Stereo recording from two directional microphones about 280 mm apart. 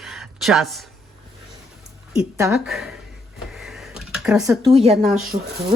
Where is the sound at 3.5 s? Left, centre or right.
Centre.